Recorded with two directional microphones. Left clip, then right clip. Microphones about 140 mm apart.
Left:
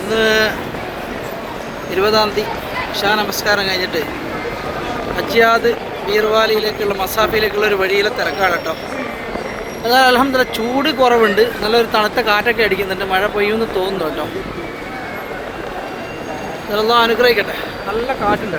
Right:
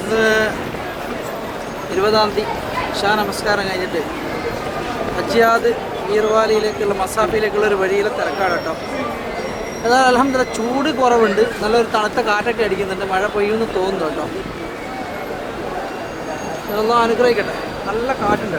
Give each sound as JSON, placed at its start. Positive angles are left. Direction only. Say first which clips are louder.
{"t": 0.1, "sound": "a sound", "louder": "left 1 dB", "side_deg": 15}
{"t": 2.0, "sound": "speech", "louder": "left 1 dB", "side_deg": 10}
{"t": 5.1, "sound": "speech", "louder": "left 2 dB", "side_deg": 15}
{"t": 9.8, "sound": "speech", "louder": "left 2 dB", "side_deg": 25}
{"t": 16.7, "sound": "speech", "louder": "left 2 dB", "side_deg": 40}